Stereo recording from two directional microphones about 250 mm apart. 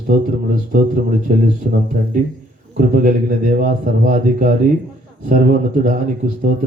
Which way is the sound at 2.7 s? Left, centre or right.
Right.